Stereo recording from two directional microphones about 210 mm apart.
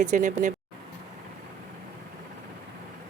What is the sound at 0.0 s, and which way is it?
Speech, 35° right (ahead or behind).